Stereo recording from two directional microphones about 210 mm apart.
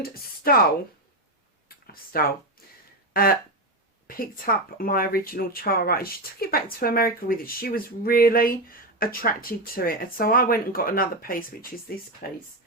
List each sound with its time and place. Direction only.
0.0 s speech: 45° left (ahead or behind)
1.6 s a sound: 45° left (ahead or behind)
4.0 s speech: 45° left (ahead or behind)